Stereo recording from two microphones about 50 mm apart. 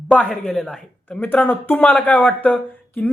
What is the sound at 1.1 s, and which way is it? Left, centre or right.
Speech, left.